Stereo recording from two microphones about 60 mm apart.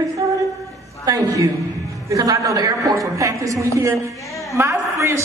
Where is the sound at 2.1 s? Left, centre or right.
Right.